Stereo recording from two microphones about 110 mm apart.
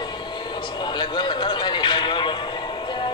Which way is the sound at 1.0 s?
45° left (ahead or behind).